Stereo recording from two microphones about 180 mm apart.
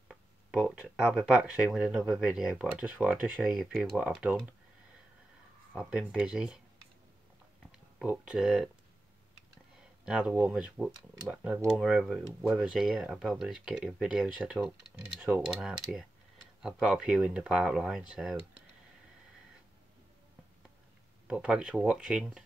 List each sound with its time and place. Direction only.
0.1 s speech: 5° right (ahead or behind)
5.8 s speech: 5° right (ahead or behind)
7.7 s speech: 5° right (ahead or behind)
10.0 s speech: 5° right (ahead or behind)
21.3 s speech: 5° right (ahead or behind)